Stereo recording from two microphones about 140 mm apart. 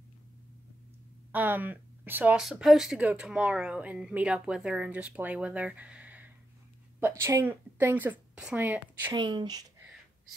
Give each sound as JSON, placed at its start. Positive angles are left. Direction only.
{"t": 1.3, "sound": "speech", "side_deg": -15}
{"t": 2.4, "sound": "a woman's voice", "side_deg": 0}
{"t": 9.1, "sound": "a woman's voice", "side_deg": -35}